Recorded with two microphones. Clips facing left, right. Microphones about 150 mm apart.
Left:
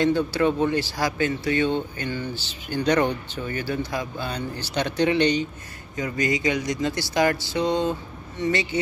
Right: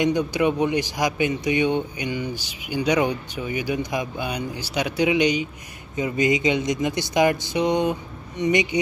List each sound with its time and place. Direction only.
0.0 s speech: 15° right (ahead or behind)
5.9 s speech: 20° right (ahead or behind)